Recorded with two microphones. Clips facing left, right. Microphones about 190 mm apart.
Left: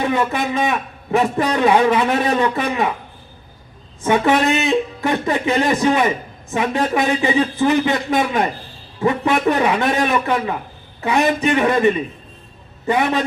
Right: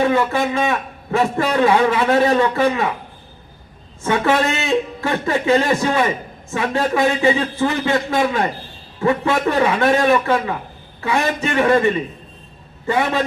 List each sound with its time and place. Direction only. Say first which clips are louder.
0.0 s a man's voice: right 2 dB; 15° left (ahead or behind)
4.0 s a man's voice: left 2 dB; 15° left (ahead or behind)